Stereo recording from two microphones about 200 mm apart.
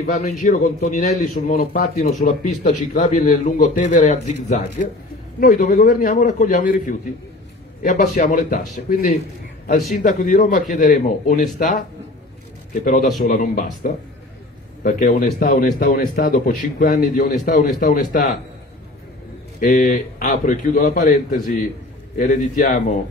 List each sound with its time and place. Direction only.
0.0 s a man's voice: 40° left (ahead or behind)
9.9 s a man's voice: 40° left (ahead or behind)
13.2 s a man's voice: 45° left (ahead or behind)
19.6 s a man's voice: 40° left (ahead or behind)